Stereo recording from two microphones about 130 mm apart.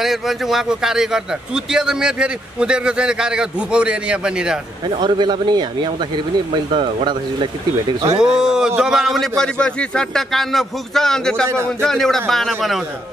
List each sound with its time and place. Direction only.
0.0 s a man's voice: centre (ahead or behind)
4.8 s speech: 35° right (ahead or behind)
8.2 s a man's voice: 5° right (ahead or behind)
11.4 s a man's voice: 20° right (ahead or behind)
11.8 s a man's voice: 5° left (ahead or behind)